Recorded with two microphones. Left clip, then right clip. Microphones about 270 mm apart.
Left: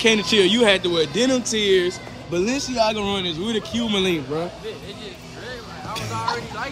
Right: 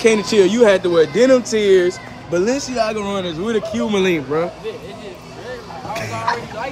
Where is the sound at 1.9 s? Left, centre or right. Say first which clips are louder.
Right 6 dB; centre.